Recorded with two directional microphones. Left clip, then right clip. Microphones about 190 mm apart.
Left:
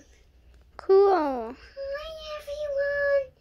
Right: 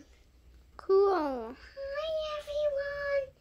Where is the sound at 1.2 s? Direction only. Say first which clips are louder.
Left 6 dB; centre (ahead or behind).